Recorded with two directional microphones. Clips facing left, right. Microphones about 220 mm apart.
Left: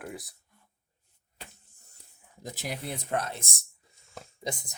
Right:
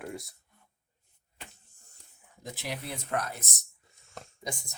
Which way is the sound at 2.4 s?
40° left (ahead or behind).